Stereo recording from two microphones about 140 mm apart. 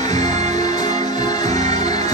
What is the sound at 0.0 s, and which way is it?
Music, 55° right (ahead or behind).